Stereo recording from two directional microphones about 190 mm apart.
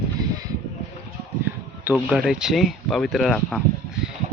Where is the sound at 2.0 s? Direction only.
Centre (ahead or behind).